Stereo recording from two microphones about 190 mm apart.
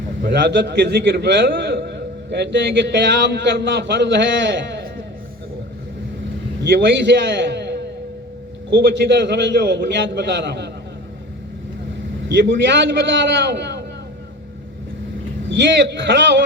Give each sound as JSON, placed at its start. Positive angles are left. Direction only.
{"t": 0.2, "sound": "a man's voice", "side_deg": -65}
{"t": 6.7, "sound": "a man's voice", "side_deg": -65}
{"t": 12.3, "sound": "a man's voice", "side_deg": -65}
{"t": 15.6, "sound": "a man's voice", "side_deg": -65}